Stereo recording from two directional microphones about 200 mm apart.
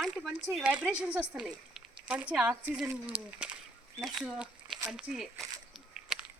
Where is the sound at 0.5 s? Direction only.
5° right (ahead or behind).